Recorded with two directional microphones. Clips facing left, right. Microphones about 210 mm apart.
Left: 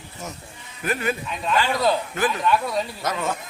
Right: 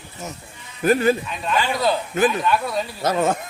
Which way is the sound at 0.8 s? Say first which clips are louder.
Right 8 dB; 35° right (ahead or behind).